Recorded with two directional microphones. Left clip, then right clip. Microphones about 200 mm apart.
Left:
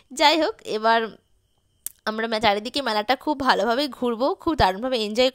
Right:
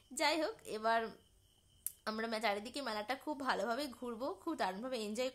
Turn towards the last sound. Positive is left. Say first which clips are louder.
# left 18 dB
turn(degrees=45)  # may be behind; listen again after turning